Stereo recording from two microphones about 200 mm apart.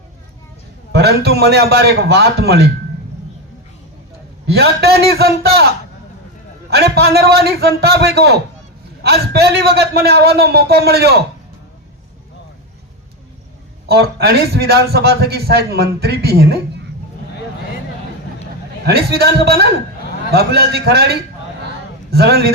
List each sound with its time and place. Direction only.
0.9 s a man's voice: 55° right (ahead or behind)
4.5 s a man's voice: 55° right (ahead or behind)
6.7 s a man's voice: 55° right (ahead or behind)
13.8 s a man's voice: 55° right (ahead or behind)
18.9 s a man's voice: 55° right (ahead or behind)